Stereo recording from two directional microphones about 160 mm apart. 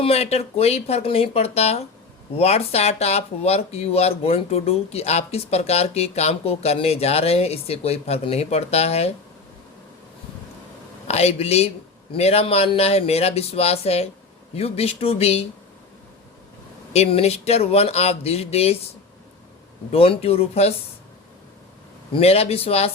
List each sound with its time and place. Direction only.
0.0 s speech: 40° left (ahead or behind)
11.1 s speech: 40° left (ahead or behind)
16.9 s speech: 40° left (ahead or behind)
19.9 s speech: 35° left (ahead or behind)
22.1 s speech: 40° left (ahead or behind)